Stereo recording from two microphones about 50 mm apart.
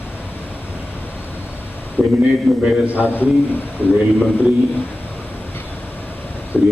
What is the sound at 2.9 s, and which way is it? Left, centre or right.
Speech, left.